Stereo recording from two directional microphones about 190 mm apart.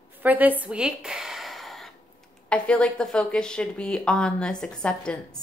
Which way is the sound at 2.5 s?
5° left (ahead or behind).